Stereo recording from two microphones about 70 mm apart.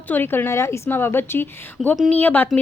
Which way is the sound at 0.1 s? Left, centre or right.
Left.